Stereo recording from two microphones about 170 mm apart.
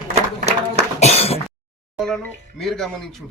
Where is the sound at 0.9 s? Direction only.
40° left (ahead or behind).